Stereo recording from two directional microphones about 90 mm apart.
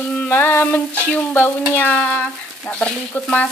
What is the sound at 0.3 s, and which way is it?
Stir, 25° left (ahead or behind).